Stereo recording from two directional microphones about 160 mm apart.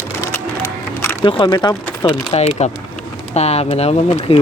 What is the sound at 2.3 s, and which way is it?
Speech, 40° left (ahead or behind).